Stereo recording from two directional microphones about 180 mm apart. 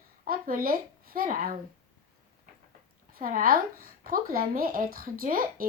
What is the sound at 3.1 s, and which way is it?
Speech, 50° right (ahead or behind).